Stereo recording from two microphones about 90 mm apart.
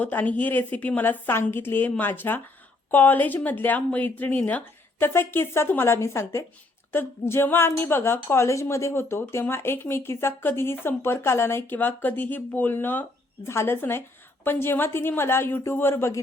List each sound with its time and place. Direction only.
0.0 s a woman's voice: 20° left (ahead or behind)